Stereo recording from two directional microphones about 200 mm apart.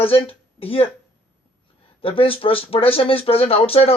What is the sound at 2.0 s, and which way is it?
Speech, 25° left (ahead or behind).